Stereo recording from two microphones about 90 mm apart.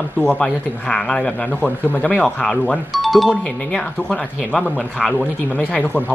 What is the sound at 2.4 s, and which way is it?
Speech, 10° left (ahead or behind).